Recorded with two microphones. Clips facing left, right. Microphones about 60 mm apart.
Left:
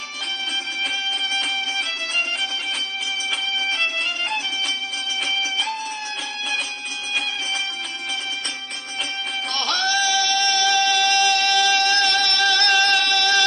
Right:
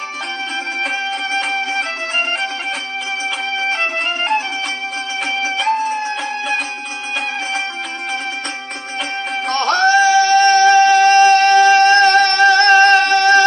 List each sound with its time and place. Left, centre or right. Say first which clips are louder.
1.5 s music: right 6 dB; right
3.5 s music: right 6 dB; right
5.7 s music: right 11 dB; right
9.5 s music: right 11 dB; right